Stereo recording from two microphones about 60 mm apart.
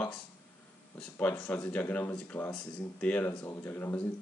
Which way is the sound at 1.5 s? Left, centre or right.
Left.